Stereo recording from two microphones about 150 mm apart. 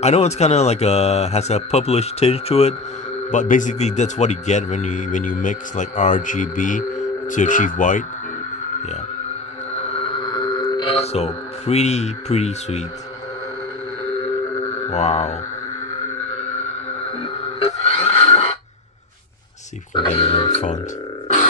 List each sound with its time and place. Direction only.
0.0 s speech: 45° left (ahead or behind)
3.3 s speech: 60° left (ahead or behind)
9.8 s music: 40° left (ahead or behind)
14.8 s speech: 50° left (ahead or behind)
17.8 s a sound: 40° left (ahead or behind)
19.9 s speech: 35° left (ahead or behind)